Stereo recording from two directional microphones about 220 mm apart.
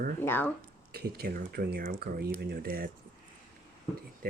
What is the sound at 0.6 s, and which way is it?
Speech, 45° right (ahead or behind).